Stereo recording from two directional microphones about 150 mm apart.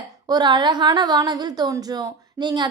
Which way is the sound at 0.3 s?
30° right (ahead or behind).